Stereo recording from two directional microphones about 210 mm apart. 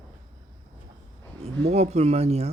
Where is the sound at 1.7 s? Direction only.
30° right (ahead or behind).